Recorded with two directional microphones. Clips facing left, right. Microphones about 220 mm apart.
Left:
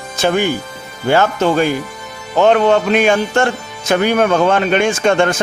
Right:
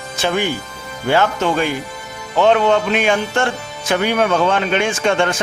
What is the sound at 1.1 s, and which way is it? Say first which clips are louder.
A man's voice: left 3 dB; 45° left (ahead or behind).